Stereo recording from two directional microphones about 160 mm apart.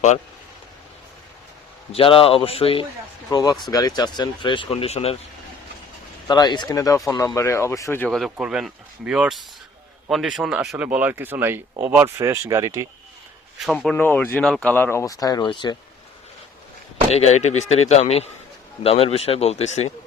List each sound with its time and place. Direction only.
1.9 s speech: 35° left (ahead or behind)
3.2 s speech: 25° left (ahead or behind); by 5.1 s 40° left (ahead or behind)
6.2 s speech: 25° left (ahead or behind)
8.1 s speech: centre (ahead or behind); by 12.9 s 20° right (ahead or behind)
13.6 s speech: centre (ahead or behind)
13.9 s speech: 15° left (ahead or behind); by 15.7 s 30° left (ahead or behind)
17.1 s speech: 40° left (ahead or behind)